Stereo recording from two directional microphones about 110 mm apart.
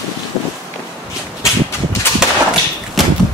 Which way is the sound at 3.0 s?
Centre (ahead or behind).